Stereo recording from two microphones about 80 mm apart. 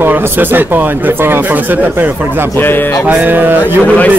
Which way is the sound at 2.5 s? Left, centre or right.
Left.